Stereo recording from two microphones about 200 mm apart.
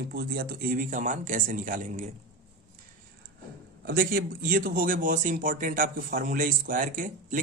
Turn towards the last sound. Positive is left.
turn(degrees=-40)  # may be behind; listen again after turning